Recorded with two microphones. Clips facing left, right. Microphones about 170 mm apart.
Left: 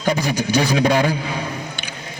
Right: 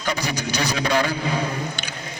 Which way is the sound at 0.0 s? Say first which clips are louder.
Left 6 dB; 50° left (ahead or behind).